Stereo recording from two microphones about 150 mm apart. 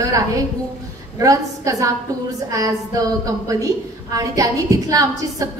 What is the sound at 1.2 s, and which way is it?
A woman's voice, 20° right (ahead or behind).